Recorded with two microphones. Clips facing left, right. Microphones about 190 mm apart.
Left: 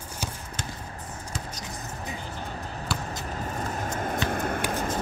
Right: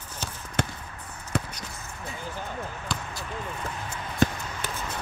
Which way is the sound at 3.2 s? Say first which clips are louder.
Left 1 dB; 40° left (ahead or behind).